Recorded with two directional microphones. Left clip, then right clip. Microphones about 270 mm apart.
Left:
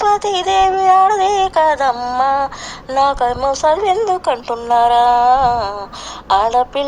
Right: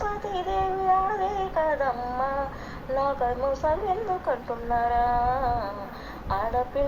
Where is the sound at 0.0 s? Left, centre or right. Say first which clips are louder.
Left 15 dB; left.